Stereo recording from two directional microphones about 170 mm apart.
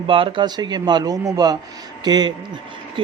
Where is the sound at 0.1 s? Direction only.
30° right (ahead or behind).